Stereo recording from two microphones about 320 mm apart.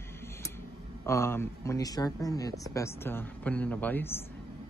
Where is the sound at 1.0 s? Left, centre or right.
Centre.